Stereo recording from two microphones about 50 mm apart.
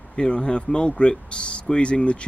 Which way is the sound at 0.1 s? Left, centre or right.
Centre.